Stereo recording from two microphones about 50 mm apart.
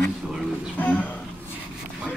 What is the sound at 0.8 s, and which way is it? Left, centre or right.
Speech, left.